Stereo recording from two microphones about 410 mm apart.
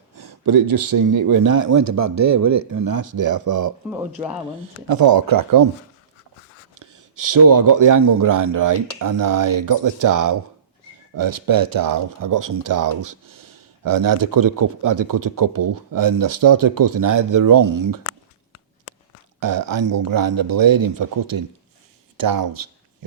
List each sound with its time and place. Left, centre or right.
0.2 s speech: right
3.8 s speech: centre
4.9 s speech: right
6.7 s speech: right
19.4 s speech: right